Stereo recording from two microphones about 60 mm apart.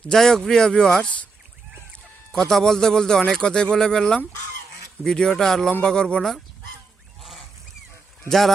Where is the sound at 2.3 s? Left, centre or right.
Centre.